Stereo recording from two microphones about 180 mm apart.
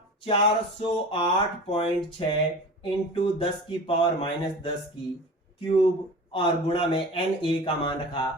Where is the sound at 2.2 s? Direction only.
30° left (ahead or behind).